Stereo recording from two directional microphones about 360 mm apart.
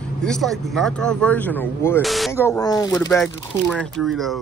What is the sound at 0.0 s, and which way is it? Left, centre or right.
A woman's voice, centre.